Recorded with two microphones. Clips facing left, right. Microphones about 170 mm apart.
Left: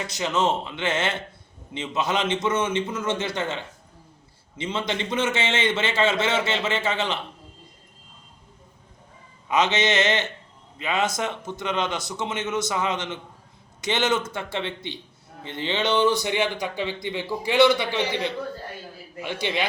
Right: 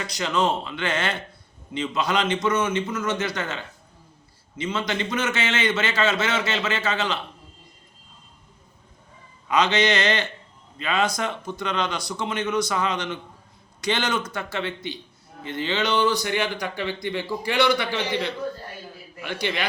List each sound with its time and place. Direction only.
0.0 s a man's voice: 20° left (ahead or behind)
9.5 s a man's voice: 20° left (ahead or behind)
19.2 s a man's voice: 15° left (ahead or behind)